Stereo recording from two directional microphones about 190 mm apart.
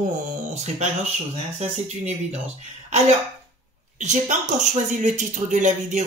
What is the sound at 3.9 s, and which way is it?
Speech, 40° right (ahead or behind).